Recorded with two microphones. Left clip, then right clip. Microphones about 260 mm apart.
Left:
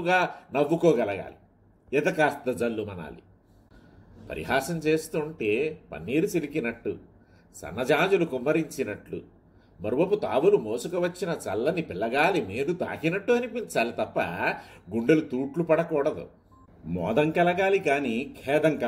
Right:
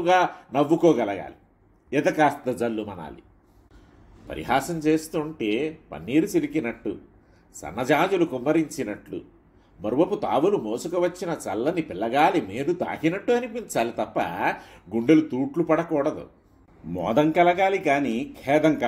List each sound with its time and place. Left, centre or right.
0.3 s speech: right
4.3 s speech: right